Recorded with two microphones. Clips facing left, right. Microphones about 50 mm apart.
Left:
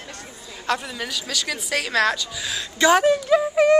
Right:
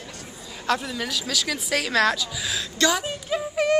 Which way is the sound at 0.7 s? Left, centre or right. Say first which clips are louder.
Even; centre.